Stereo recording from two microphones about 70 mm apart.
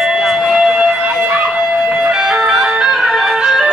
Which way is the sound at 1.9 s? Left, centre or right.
Centre.